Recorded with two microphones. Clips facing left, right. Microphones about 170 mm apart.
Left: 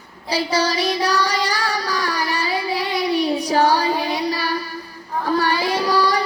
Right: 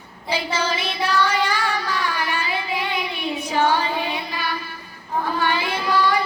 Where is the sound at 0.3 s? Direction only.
35° left (ahead or behind).